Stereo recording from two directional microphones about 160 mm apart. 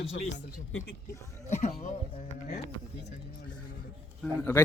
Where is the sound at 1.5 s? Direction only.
45° left (ahead or behind).